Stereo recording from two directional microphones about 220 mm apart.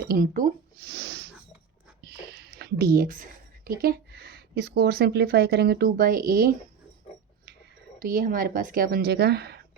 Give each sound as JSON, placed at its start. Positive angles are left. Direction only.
{"t": 0.1, "sound": "speech", "side_deg": -40}
{"t": 7.9, "sound": "a woman's voice", "side_deg": -40}